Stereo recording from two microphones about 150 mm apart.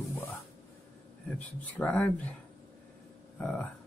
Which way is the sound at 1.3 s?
10° left (ahead or behind).